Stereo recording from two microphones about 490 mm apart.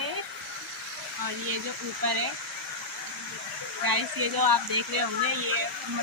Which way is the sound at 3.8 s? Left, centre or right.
Right.